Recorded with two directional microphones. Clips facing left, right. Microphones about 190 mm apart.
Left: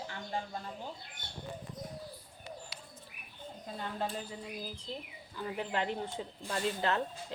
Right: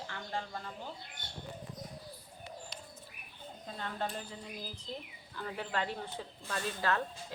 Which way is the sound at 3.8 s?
5° left (ahead or behind).